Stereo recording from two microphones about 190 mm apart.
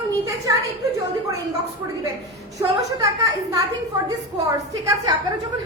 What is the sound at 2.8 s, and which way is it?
A woman's voice, 20° right (ahead or behind).